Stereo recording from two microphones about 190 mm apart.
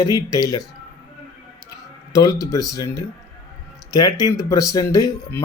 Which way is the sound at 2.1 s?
20° left (ahead or behind).